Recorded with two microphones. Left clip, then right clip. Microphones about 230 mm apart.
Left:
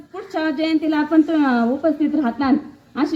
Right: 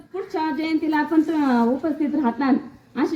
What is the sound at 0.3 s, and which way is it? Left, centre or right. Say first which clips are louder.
A woman's voice: left 4 dB; left.